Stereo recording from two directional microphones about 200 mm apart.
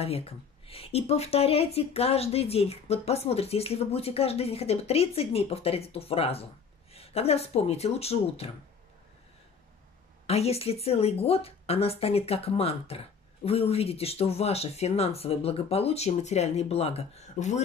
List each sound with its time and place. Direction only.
0.0 s speech: 30° left (ahead or behind)
10.2 s speech: 30° left (ahead or behind)